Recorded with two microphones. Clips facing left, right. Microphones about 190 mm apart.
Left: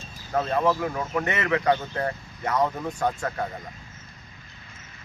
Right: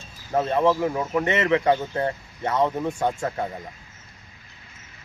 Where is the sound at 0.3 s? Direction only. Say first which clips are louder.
Right 3 dB; 25° right (ahead or behind).